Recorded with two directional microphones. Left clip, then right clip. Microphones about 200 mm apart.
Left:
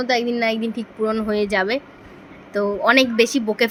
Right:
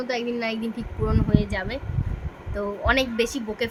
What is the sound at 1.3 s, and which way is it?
Speech, 30° left (ahead or behind).